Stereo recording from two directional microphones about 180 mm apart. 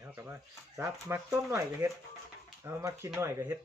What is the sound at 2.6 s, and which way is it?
Speech, 15° right (ahead or behind).